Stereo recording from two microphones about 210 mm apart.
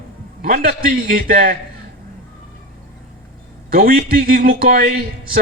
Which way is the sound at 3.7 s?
45° right (ahead or behind).